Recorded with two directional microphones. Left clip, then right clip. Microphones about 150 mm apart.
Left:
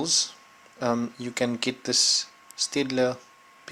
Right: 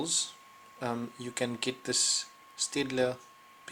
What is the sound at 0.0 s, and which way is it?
Speech, 45° left (ahead or behind).